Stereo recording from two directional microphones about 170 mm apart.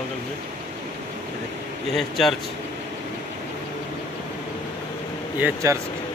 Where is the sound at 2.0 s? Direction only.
Centre (ahead or behind).